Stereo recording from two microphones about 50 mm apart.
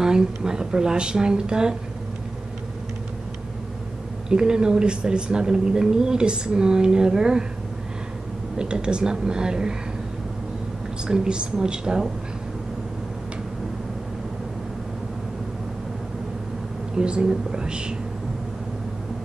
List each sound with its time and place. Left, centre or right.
0.0 s speech: centre
4.3 s speech: centre
8.5 s speech: centre
11.1 s speech: centre
16.9 s speech: centre